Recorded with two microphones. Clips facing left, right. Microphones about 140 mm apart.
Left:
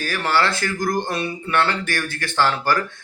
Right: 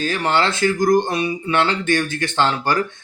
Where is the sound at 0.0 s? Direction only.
20° right (ahead or behind).